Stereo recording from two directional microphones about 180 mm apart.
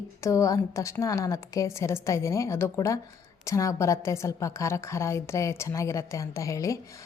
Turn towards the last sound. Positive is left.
turn(degrees=15)  # may be behind; listen again after turning